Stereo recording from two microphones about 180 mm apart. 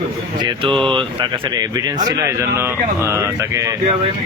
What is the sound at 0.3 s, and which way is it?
Speech, 25° right (ahead or behind).